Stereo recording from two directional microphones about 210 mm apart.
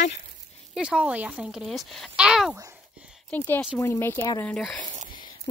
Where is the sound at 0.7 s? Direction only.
5° right (ahead or behind).